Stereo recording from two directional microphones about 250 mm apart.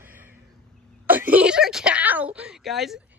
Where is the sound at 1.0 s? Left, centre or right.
Centre.